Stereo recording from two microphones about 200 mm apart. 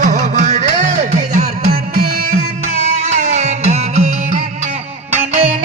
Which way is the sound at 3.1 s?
35° right (ahead or behind).